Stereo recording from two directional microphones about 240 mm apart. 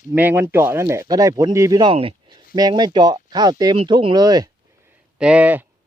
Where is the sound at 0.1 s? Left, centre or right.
Centre.